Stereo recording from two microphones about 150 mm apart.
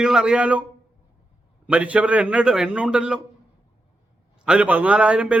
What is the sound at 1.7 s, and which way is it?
A man's voice, 10° right (ahead or behind).